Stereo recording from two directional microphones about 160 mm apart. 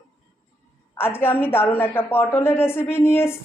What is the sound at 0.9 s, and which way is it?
A woman's voice, 15° left (ahead or behind).